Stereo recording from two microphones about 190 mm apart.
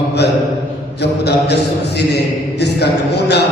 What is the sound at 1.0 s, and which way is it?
Mantra, 60° left (ahead or behind).